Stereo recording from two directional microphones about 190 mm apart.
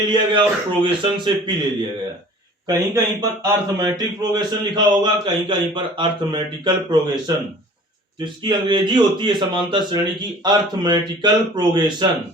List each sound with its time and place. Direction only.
0.1 s a man's voice: 25° right (ahead or behind)
2.6 s a man's voice: 15° right (ahead or behind)
8.2 s a man's voice: 25° right (ahead or behind)